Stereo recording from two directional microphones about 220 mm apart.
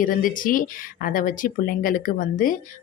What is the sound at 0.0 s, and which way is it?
Speech, 40° left (ahead or behind).